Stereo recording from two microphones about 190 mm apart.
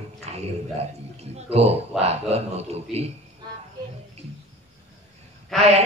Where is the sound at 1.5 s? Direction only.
35° right (ahead or behind).